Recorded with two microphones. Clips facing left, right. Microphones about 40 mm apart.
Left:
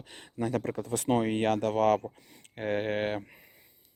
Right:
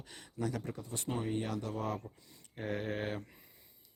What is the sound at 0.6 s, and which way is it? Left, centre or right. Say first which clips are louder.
Speech: left 11 dB; left.